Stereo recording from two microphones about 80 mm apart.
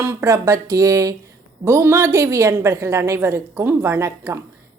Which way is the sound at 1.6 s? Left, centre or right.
Right.